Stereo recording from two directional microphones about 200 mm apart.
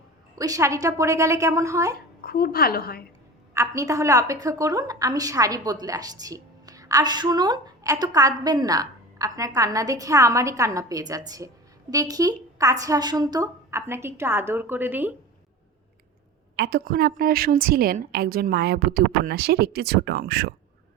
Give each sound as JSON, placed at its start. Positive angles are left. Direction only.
{"t": 0.3, "sound": "a woman's voice", "side_deg": -15}
{"t": 2.2, "sound": "a woman's voice", "side_deg": 50}
{"t": 3.5, "sound": "a woman's voice", "side_deg": -15}
{"t": 16.6, "sound": "a woman's voice", "side_deg": -55}